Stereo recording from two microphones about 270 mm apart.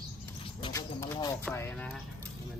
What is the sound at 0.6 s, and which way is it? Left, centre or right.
Speech, centre.